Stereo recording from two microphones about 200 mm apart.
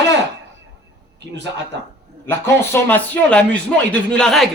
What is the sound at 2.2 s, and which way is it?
Speech, 10° left (ahead or behind).